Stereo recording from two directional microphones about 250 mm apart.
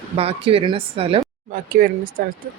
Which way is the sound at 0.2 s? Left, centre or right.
Right.